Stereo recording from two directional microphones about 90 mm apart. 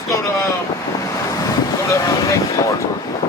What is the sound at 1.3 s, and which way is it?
Wind noise, 35° left (ahead or behind).